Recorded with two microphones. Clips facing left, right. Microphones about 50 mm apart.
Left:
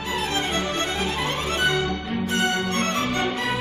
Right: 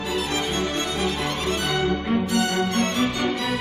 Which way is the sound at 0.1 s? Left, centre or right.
Left.